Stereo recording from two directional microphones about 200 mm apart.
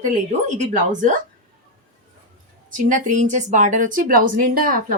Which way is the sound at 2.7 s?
40° right (ahead or behind).